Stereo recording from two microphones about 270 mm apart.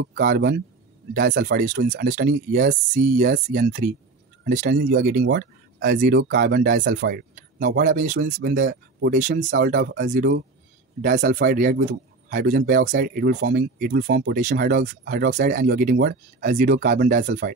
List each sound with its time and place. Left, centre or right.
0.0 s a man's voice: right